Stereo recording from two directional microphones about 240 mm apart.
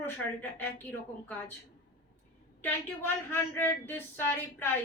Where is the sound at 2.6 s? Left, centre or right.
Centre.